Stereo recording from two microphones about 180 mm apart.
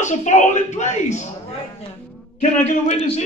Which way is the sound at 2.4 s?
40° left (ahead or behind).